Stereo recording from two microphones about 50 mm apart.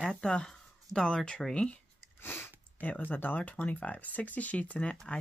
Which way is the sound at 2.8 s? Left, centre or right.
Left.